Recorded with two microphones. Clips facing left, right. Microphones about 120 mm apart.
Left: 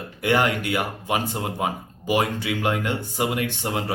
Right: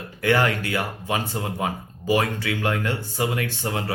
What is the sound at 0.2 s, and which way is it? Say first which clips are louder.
Speech: even; 20° left (ahead or behind).